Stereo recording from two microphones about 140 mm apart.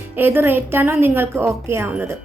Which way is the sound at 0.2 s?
15° right (ahead or behind).